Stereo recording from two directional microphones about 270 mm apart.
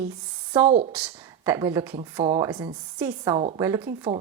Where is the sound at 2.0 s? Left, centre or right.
Right.